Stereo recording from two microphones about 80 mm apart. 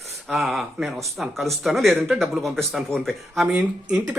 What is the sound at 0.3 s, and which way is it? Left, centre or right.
Speech, centre.